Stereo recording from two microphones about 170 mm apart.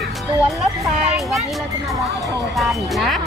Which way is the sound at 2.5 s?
Centre (ahead or behind).